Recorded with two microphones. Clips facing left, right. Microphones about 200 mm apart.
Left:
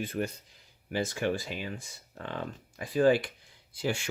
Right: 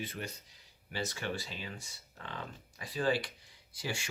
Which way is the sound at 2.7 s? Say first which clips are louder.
Left 9 dB; 50° left (ahead or behind).